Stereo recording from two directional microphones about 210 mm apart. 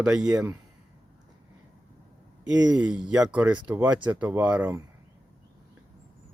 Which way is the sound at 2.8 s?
5° right (ahead or behind).